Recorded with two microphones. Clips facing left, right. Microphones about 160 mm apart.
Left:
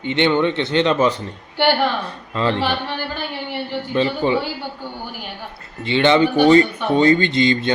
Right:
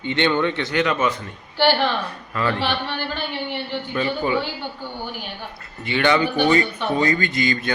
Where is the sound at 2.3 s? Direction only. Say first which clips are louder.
Left 3 dB; 25° left (ahead or behind).